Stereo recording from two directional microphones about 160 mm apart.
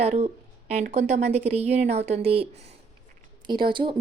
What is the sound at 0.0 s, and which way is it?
Speech, 40° right (ahead or behind).